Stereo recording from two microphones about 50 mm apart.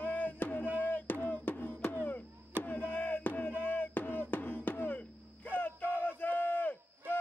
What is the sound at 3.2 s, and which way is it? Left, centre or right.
Music, left.